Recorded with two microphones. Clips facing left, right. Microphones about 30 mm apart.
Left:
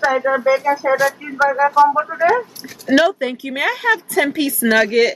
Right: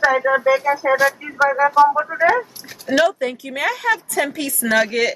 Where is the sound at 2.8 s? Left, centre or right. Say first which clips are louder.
Left 2 dB; centre.